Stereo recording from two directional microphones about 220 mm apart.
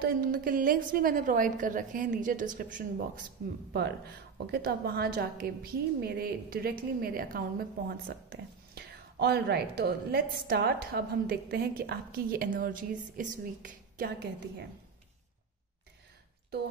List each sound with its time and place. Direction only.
0.0 s a woman's voice: 40° right (ahead or behind)